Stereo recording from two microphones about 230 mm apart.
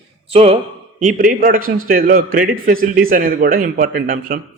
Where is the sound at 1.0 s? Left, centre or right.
Right.